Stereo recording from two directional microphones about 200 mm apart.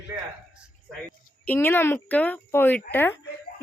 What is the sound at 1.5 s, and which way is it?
A woman's voice, 10° left (ahead or behind).